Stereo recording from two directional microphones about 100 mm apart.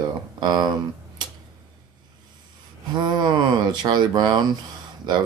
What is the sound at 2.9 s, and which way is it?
Speech, 45° right (ahead or behind).